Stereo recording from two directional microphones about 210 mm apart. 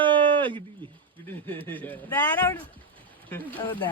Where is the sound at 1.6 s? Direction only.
10° left (ahead or behind).